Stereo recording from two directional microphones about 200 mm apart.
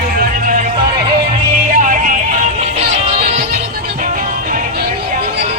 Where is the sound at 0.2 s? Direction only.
45° right (ahead or behind).